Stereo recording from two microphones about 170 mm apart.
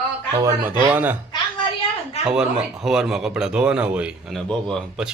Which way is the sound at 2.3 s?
5° right (ahead or behind).